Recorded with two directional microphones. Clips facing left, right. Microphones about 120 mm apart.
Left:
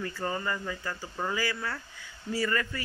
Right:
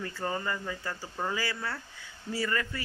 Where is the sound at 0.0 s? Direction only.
20° right (ahead or behind).